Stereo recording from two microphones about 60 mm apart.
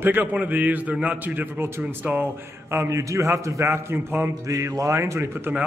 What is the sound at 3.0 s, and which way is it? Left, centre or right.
Speech, right.